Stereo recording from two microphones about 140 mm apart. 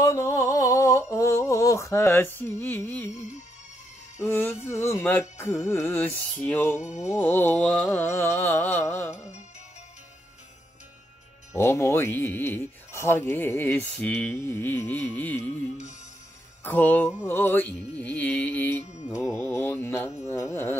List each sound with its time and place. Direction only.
0.0 s a sound: 20° left (ahead or behind)
4.2 s speech: 15° left (ahead or behind)
11.5 s speech: 20° left (ahead or behind)
16.6 s speech: 10° left (ahead or behind)
19.0 s music: 5° right (ahead or behind)
19.3 s speech: 20° left (ahead or behind)